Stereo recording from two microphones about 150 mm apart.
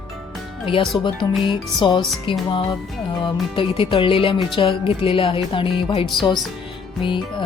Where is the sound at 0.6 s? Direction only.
35° left (ahead or behind).